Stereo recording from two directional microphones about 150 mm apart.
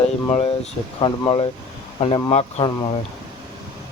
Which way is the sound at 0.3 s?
45° left (ahead or behind).